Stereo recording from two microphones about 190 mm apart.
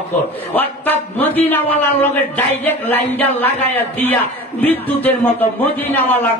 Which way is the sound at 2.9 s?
10° left (ahead or behind).